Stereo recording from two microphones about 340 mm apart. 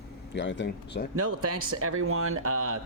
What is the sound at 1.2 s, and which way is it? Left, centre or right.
Speech, right.